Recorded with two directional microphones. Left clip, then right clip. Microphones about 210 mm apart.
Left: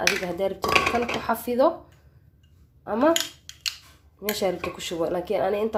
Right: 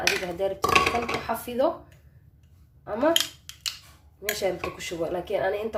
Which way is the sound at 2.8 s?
30° left (ahead or behind).